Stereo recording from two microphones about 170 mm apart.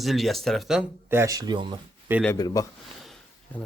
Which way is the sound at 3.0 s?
5° left (ahead or behind).